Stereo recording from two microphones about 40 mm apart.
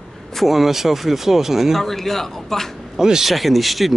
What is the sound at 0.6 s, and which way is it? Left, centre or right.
Speech, centre.